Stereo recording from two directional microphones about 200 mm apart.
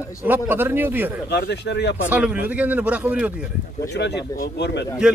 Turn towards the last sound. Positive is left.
turn(degrees=55)  # may be behind; listen again after turning